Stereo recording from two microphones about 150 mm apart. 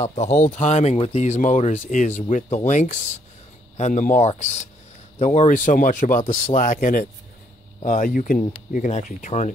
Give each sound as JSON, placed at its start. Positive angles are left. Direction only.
{"t": 0.0, "sound": "speech", "side_deg": 50}